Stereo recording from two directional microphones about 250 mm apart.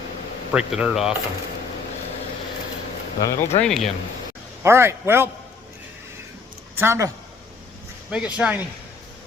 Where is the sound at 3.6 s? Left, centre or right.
Centre.